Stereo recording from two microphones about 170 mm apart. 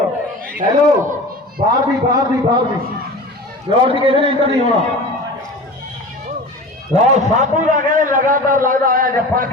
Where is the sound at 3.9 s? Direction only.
30° right (ahead or behind).